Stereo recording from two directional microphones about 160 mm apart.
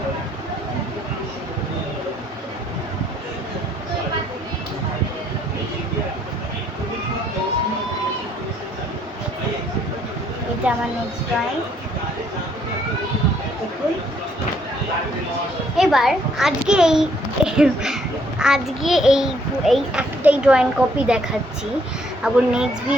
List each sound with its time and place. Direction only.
10.7 s speech: 10° right (ahead or behind)
15.7 s a child's voice: centre (ahead or behind)
22.2 s speech: 5° right (ahead or behind)